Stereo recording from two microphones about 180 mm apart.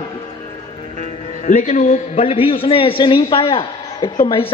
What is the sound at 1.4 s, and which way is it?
A man's voice, 45° left (ahead or behind).